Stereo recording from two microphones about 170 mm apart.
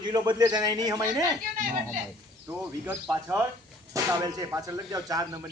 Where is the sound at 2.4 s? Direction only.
10° right (ahead or behind).